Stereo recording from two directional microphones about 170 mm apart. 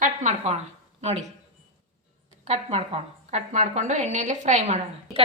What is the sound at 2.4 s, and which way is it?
A woman's voice, 40° right (ahead or behind).